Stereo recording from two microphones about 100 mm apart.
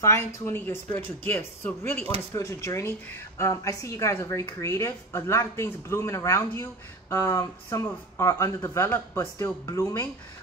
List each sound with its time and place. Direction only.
0.0 s a woman's voice: 25° left (ahead or behind)
2.3 s a woman's voice: 30° left (ahead or behind)